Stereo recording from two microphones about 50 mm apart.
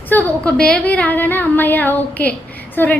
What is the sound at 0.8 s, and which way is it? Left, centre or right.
A woman's voice, left.